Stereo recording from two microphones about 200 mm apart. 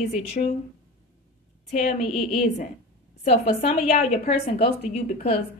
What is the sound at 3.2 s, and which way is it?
A woman's voice, 35° left (ahead or behind).